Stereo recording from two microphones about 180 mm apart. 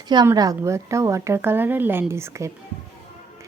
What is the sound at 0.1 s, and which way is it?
Speech, 20° right (ahead or behind).